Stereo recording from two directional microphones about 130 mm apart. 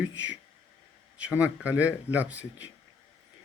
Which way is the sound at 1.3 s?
10° right (ahead or behind).